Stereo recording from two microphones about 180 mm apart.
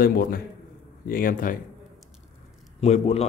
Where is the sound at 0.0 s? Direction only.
55° left (ahead or behind).